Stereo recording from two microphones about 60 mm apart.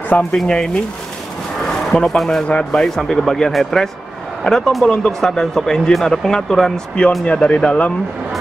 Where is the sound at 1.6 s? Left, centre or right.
Centre.